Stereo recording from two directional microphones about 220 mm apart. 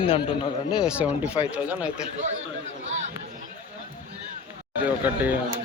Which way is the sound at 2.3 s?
60° right (ahead or behind).